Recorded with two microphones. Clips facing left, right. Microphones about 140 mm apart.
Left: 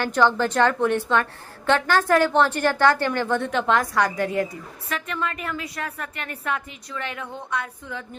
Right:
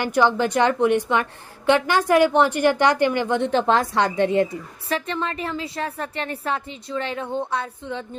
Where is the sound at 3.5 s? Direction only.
30° right (ahead or behind).